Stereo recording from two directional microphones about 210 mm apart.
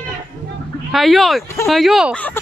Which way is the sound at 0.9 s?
Centre (ahead or behind).